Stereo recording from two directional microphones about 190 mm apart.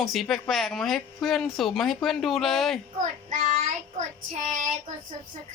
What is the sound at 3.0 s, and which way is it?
Child singing, 45° right (ahead or behind).